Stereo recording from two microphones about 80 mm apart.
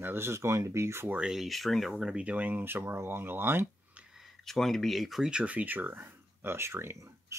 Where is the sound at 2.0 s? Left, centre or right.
Centre; by 3.6 s right.